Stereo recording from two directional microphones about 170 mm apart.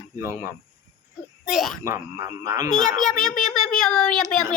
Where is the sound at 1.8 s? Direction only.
20° right (ahead or behind).